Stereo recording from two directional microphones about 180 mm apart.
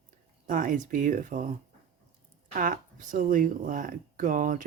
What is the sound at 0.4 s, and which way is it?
Speech, 50° right (ahead or behind).